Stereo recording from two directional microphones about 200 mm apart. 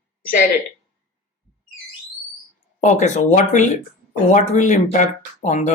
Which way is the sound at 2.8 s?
35° left (ahead or behind).